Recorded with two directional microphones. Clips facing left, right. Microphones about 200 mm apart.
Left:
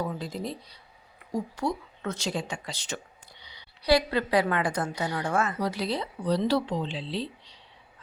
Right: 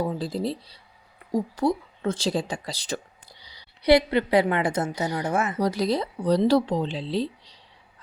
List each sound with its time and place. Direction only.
0.0 s speech: 30° right (ahead or behind)
3.8 s a woman's voice: 25° right (ahead or behind)
5.5 s speech: 40° right (ahead or behind)